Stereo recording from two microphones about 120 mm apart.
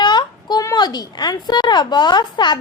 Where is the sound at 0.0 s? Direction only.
40° left (ahead or behind).